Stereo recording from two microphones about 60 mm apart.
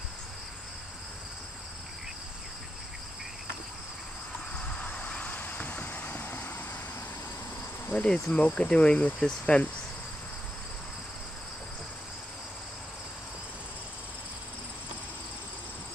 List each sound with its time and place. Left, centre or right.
4.6 s vehicle: left
7.8 s insect: left
8.1 s cricket: left